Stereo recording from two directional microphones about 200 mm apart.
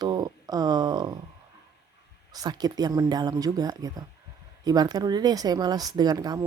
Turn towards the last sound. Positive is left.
turn(degrees=-20)  # may be behind; listen again after turning